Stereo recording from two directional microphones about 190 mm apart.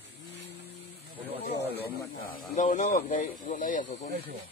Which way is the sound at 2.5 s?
40° left (ahead or behind).